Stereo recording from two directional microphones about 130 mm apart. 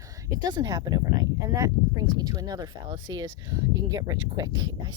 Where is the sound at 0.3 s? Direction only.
30° right (ahead or behind).